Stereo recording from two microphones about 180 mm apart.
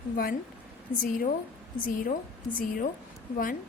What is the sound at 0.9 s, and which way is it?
Speech, 50° left (ahead or behind).